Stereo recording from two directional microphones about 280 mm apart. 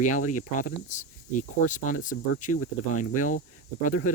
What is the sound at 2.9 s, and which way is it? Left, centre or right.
Speech, left.